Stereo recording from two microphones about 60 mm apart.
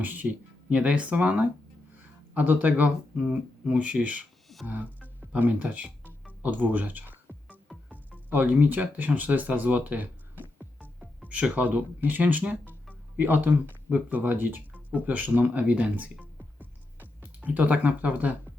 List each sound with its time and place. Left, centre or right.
0.0 s speech: right
0.7 s speech: centre
11.2 s music: right
11.5 s speech: right
16.6 s music: right